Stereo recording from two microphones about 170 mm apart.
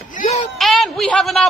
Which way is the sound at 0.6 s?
Centre (ahead or behind).